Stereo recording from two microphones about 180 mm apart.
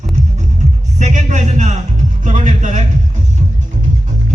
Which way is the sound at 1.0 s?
40° right (ahead or behind).